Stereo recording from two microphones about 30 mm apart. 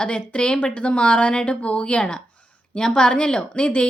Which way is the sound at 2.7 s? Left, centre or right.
Left.